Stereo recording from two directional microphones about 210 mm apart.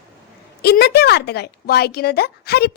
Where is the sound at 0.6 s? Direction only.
50° left (ahead or behind).